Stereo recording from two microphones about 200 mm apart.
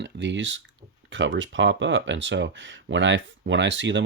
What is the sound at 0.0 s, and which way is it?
Speech, 65° right (ahead or behind).